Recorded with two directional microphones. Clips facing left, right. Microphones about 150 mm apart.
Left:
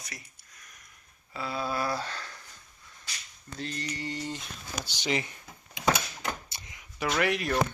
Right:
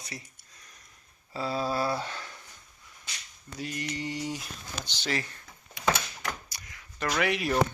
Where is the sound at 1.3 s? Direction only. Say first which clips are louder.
Right 3 dB; 35° right (ahead or behind).